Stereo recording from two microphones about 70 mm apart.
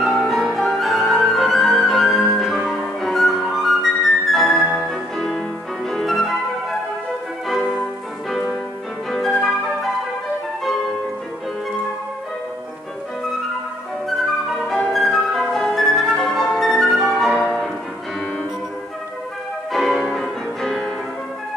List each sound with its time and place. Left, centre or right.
0.2 s music: centre
2.6 s music: centre
7.4 s music: centre
9.1 s music: centre
14.0 s flute: centre
15.5 s music: centre
19.7 s music: centre
20.2 s music: centre